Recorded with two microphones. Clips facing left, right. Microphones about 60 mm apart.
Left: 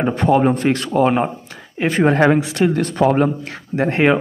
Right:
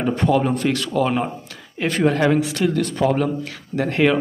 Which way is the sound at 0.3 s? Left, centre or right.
Left.